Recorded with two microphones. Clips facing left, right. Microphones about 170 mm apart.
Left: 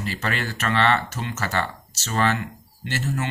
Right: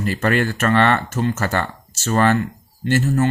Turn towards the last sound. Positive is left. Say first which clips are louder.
# right 9 dB
turn(degrees=-45)  # may be behind; listen again after turning